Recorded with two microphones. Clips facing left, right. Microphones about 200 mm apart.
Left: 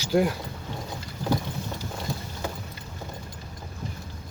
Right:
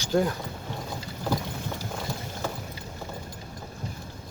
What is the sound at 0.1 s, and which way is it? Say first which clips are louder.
Speech: left 2 dB; 10° left (ahead or behind).